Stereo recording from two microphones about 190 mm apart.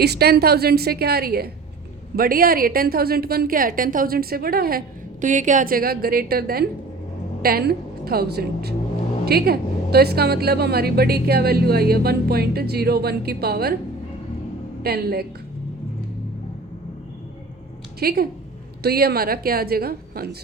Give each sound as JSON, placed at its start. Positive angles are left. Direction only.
{"t": 0.0, "sound": "a woman's voice", "side_deg": -55}
{"t": 5.2, "sound": "a woman's voice", "side_deg": -40}
{"t": 14.8, "sound": "a woman's voice", "side_deg": -55}
{"t": 18.0, "sound": "a woman's voice", "side_deg": -50}